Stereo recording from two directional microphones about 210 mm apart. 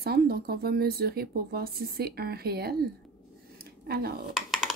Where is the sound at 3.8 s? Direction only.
50° right (ahead or behind).